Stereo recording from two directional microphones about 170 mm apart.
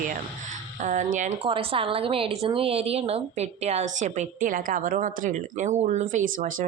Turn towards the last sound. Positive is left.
turn(degrees=-50)  # may be behind; listen again after turning